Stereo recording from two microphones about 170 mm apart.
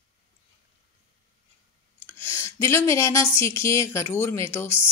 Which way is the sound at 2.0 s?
15° left (ahead or behind).